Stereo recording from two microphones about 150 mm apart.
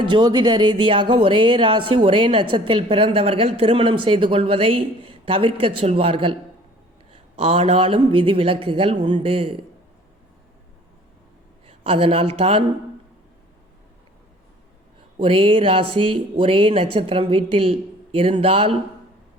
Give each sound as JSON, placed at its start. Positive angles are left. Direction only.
{"t": 0.0, "sound": "speech", "side_deg": -30}
{"t": 11.6, "sound": "a woman's voice", "side_deg": -40}
{"t": 15.2, "sound": "speech", "side_deg": -35}